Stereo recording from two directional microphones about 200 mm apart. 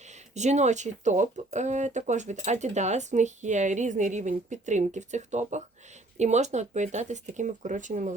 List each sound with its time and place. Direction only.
0.0 s speech: 35° right (ahead or behind)